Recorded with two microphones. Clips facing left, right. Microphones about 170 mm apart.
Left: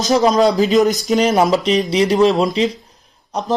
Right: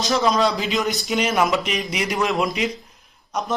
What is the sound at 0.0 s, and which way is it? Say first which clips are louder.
Speech: left 6 dB; 40° left (ahead or behind).